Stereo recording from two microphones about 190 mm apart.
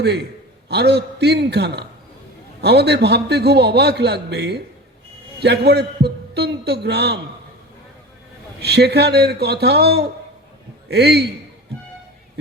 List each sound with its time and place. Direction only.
0.0 s a man's voice: 60° right (ahead or behind)
8.6 s a man's voice: 60° right (ahead or behind)